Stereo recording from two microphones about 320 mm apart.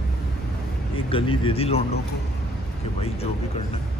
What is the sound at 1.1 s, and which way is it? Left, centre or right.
Speech, centre.